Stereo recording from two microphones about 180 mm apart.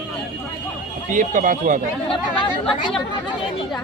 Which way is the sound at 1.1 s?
45° right (ahead or behind).